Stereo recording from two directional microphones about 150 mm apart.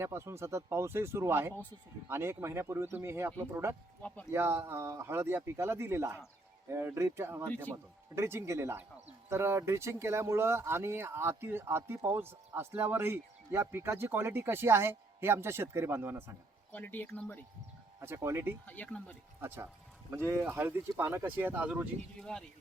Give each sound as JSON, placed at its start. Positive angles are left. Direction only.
{"t": 0.0, "sound": "speech", "side_deg": -15}
{"t": 4.0, "sound": "speech", "side_deg": 10}
{"t": 4.3, "sound": "speech", "side_deg": -15}
{"t": 16.7, "sound": "speech", "side_deg": 10}
{"t": 18.0, "sound": "speech", "side_deg": -15}
{"t": 18.6, "sound": "speech", "side_deg": 10}
{"t": 19.4, "sound": "speech", "side_deg": -15}
{"t": 22.2, "sound": "speech", "side_deg": 5}